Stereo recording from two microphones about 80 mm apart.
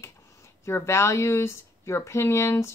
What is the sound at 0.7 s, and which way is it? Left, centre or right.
Speech, left.